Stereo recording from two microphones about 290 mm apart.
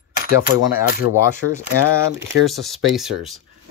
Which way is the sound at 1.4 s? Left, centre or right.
Left.